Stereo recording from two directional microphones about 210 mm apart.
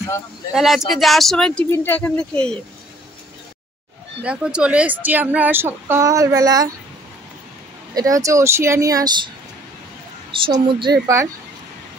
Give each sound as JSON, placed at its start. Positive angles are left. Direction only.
{"t": 0.5, "sound": "speech", "side_deg": 0}
{"t": 4.2, "sound": "speech", "side_deg": -5}
{"t": 7.9, "sound": "speech", "side_deg": -15}
{"t": 10.4, "sound": "speech", "side_deg": -25}